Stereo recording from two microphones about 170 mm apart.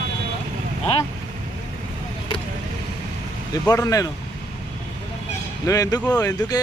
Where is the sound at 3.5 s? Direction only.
20° left (ahead or behind).